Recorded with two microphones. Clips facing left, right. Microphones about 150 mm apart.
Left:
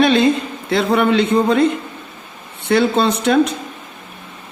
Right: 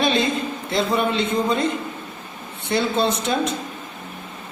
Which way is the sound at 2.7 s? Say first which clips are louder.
Left 6 dB; 65° left (ahead or behind).